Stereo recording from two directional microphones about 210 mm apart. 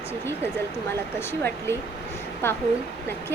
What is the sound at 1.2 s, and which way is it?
Speech, 10° left (ahead or behind).